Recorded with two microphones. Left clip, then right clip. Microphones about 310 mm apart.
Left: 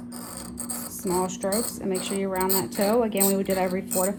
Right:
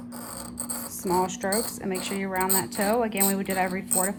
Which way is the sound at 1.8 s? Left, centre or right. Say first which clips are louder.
Left 2 dB; centre.